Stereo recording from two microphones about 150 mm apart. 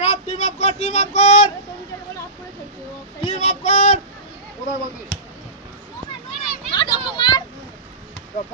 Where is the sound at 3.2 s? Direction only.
45° left (ahead or behind).